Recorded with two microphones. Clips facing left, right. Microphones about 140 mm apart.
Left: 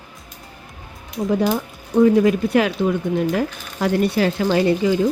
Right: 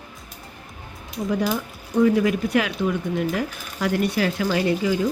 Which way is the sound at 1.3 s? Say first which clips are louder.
Left 4 dB; 30° left (ahead or behind).